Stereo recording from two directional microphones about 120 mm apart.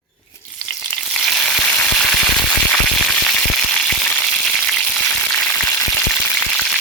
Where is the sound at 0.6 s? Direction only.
Centre (ahead or behind).